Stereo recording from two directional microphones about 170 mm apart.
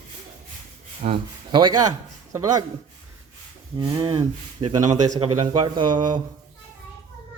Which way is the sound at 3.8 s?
25° right (ahead or behind).